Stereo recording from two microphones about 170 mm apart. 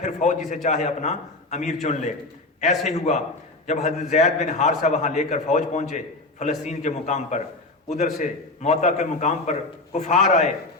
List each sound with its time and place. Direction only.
0.0 s a man's voice: 45° left (ahead or behind)